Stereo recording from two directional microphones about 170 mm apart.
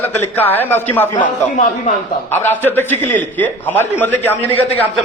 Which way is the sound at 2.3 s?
15° left (ahead or behind).